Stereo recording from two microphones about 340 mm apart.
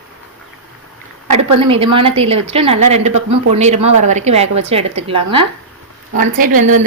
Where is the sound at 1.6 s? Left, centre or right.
Centre.